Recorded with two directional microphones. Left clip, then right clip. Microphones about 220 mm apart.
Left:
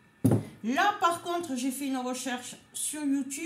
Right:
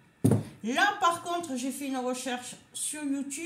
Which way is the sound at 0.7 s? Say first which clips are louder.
Even; centre (ahead or behind).